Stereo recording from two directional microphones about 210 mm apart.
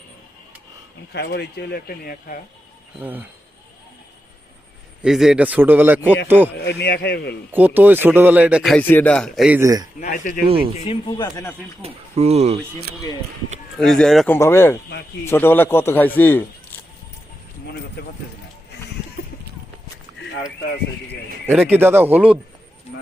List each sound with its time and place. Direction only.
1.1 s speech: 50° left (ahead or behind)
3.0 s a man's voice: 10° right (ahead or behind)
5.0 s a man's voice: centre (ahead or behind)
6.7 s speech: 50° left (ahead or behind)
7.5 s a man's voice: 10° right (ahead or behind)
9.6 s a man's voice: 15° right (ahead or behind)
10.0 s speech: 40° left (ahead or behind)
10.8 s speech: 25° left (ahead or behind)
11.8 s speech: 30° right (ahead or behind)
13.7 s a man's voice: 5° left (ahead or behind)
21.4 s a man's voice: 10° right (ahead or behind)